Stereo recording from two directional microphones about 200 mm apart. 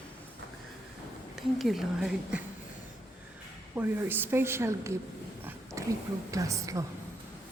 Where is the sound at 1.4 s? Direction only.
Centre (ahead or behind).